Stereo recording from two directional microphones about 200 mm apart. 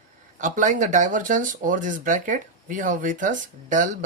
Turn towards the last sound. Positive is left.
turn(degrees=-40)  # may be behind; listen again after turning